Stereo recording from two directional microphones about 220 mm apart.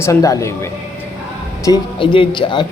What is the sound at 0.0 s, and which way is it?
Speech, 15° left (ahead or behind).